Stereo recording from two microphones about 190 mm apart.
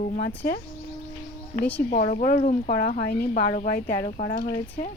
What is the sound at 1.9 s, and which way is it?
Speech, 45° left (ahead or behind).